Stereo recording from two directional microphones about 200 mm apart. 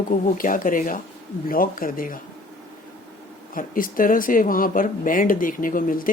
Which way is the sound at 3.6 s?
45° left (ahead or behind).